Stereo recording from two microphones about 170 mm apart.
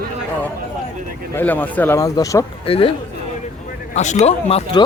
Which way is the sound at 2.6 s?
35° left (ahead or behind).